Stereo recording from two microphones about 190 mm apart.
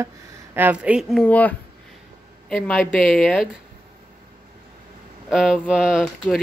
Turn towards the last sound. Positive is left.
turn(degrees=0)  # may be behind; listen again after turning